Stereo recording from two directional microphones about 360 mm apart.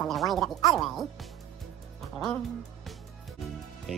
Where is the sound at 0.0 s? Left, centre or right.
Centre.